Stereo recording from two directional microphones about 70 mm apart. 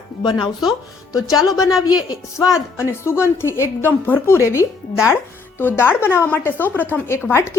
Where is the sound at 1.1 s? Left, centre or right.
Left.